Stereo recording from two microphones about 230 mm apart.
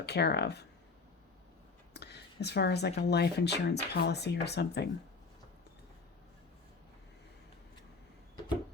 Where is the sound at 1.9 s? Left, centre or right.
Left.